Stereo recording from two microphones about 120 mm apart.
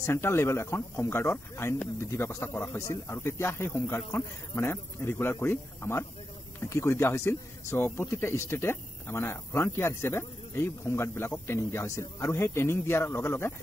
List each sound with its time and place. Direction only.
0.0 s speech: 20° left (ahead or behind)